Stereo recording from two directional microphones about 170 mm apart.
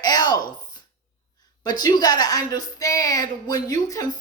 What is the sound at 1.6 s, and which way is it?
A woman's voice, 25° left (ahead or behind).